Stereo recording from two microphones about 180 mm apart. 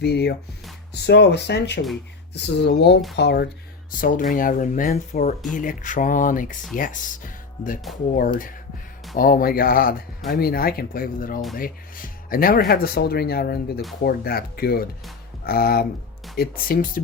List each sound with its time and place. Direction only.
0.0 s speech: 65° left (ahead or behind)
4.0 s speech: 50° left (ahead or behind)
8.1 s speech: 50° left (ahead or behind)